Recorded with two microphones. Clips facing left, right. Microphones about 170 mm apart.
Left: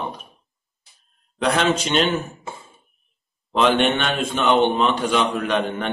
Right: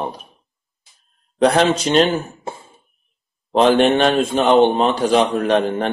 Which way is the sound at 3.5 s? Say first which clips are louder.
Right 5 dB; 35° right (ahead or behind).